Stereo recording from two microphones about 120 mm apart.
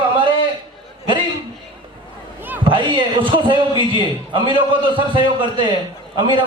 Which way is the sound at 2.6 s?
45° right (ahead or behind).